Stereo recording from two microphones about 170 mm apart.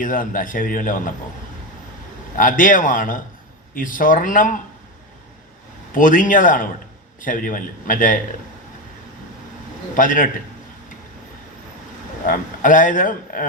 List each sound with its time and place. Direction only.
0.0 s a man's voice: 55° left (ahead or behind)
2.3 s a man's voice: 50° left (ahead or behind)
5.9 s a man's voice: 50° left (ahead or behind)
9.9 s a man's voice: 50° left (ahead or behind)
12.2 s speech: 50° left (ahead or behind)